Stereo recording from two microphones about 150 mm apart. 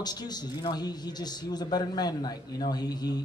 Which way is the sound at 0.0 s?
25° left (ahead or behind).